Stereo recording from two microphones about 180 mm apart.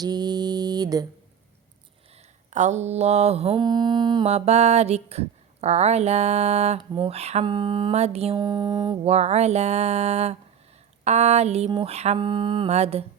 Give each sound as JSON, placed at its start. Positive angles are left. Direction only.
{"t": 0.0, "sound": "mantra", "side_deg": -20}
{"t": 2.5, "sound": "speech", "side_deg": -40}
{"t": 4.3, "sound": "speech", "side_deg": -35}
{"t": 7.4, "sound": "mantra", "side_deg": -25}
{"t": 8.4, "sound": "mantra", "side_deg": -20}
{"t": 9.0, "sound": "speech", "side_deg": -35}
{"t": 12.2, "sound": "mantra", "side_deg": -25}